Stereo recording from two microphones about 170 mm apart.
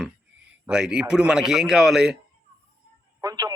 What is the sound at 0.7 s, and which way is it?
A man's voice, 5° right (ahead or behind).